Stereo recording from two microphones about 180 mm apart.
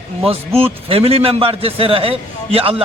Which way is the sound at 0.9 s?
30° right (ahead or behind).